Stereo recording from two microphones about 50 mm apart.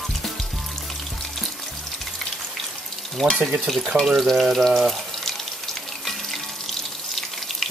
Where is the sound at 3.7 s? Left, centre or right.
Centre.